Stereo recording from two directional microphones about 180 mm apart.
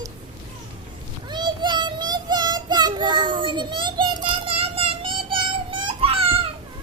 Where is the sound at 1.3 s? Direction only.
25° right (ahead or behind).